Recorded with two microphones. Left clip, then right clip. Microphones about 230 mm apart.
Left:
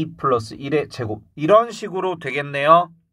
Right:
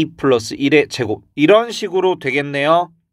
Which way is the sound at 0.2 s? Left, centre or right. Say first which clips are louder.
Right 4 dB; right.